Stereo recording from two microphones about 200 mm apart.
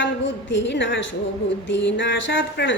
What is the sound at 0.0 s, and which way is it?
A woman's voice, 65° left (ahead or behind).